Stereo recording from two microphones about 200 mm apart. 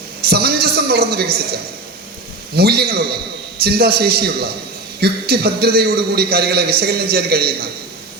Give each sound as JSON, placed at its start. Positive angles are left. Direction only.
{"t": 0.3, "sound": "a man's voice", "side_deg": -50}
{"t": 2.6, "sound": "a man's voice", "side_deg": -50}